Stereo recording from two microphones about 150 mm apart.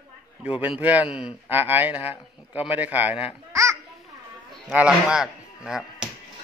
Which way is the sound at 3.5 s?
20° right (ahead or behind).